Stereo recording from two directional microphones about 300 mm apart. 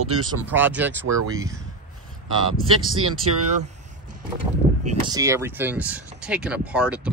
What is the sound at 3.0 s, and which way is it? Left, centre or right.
Speech, right.